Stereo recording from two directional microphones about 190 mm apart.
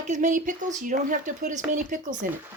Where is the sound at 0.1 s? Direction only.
40° right (ahead or behind).